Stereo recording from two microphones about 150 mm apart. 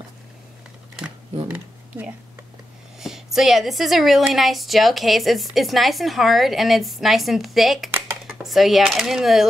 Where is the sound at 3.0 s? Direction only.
5° right (ahead or behind).